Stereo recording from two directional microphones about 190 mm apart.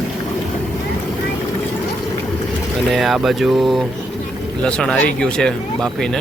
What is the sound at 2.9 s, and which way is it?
Speech, centre (ahead or behind).